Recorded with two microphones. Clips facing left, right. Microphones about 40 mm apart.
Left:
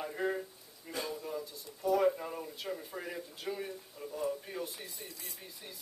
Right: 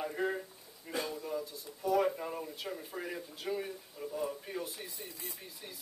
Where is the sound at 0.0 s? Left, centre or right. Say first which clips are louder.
Even; centre.